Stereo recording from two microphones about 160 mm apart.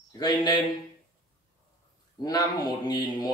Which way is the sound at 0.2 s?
25° left (ahead or behind).